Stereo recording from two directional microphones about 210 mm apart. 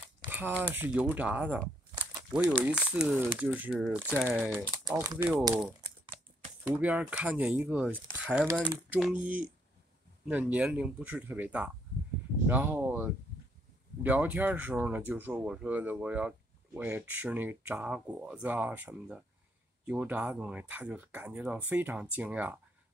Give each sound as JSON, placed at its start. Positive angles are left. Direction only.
{"t": 0.3, "sound": "speech", "side_deg": -10}
{"t": 5.5, "sound": "speech", "side_deg": -5}